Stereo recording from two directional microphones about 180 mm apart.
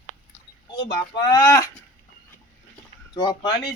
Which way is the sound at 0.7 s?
25° left (ahead or behind).